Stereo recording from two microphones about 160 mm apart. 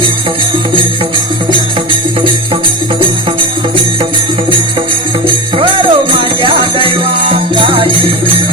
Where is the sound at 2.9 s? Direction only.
30° right (ahead or behind).